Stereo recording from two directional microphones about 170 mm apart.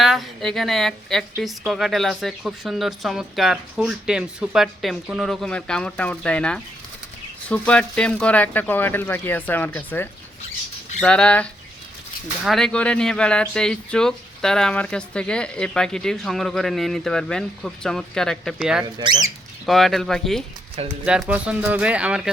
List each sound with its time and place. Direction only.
0.0 s a woman's voice: centre (ahead or behind)
18.9 s speech: 25° right (ahead or behind)
19.6 s speech: centre (ahead or behind)